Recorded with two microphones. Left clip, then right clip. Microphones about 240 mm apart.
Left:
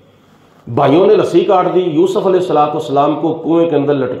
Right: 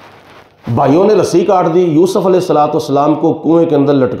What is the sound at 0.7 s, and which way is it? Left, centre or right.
A man's voice, right.